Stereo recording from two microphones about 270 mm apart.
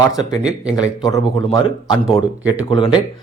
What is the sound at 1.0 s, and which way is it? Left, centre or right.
Speech, centre.